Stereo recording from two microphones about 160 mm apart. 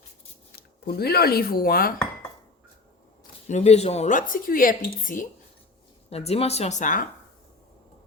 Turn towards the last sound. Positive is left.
turn(degrees=55)  # may be behind; listen again after turning